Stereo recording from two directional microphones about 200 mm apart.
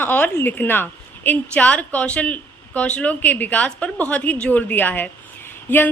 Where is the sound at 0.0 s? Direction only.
10° left (ahead or behind).